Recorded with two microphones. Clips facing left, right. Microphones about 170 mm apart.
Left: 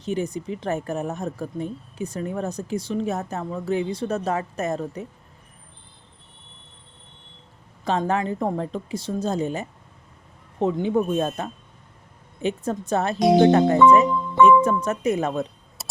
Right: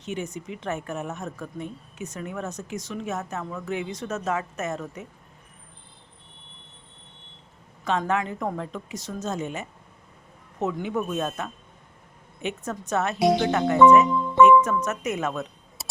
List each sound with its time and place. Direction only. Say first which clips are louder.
0.0 s a woman's voice: left 6 dB; 35° left (ahead or behind)
7.9 s a woman's voice: left 2 dB; 35° left (ahead or behind)